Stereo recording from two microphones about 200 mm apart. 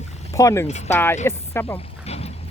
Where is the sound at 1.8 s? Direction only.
30° left (ahead or behind).